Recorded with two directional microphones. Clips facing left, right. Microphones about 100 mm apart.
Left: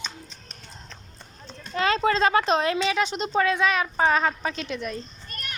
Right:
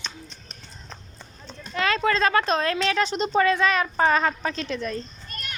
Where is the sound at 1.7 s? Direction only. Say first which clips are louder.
Left 1 dB; 25° left (ahead or behind).